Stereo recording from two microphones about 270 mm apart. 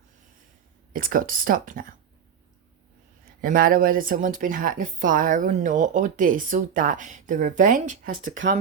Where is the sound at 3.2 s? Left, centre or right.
Right.